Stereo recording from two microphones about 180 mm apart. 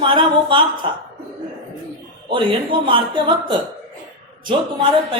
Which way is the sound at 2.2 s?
30° right (ahead or behind).